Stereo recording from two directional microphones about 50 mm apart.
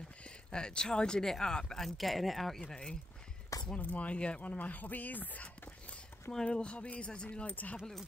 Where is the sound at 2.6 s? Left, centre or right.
Centre.